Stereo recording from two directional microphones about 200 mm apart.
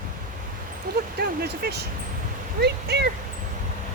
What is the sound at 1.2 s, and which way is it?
Speech, 55° right (ahead or behind).